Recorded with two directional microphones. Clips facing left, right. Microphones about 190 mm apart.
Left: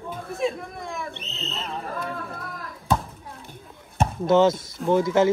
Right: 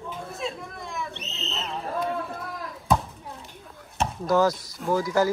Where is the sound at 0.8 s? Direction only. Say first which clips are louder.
Right 1 dB; 55° left (ahead or behind).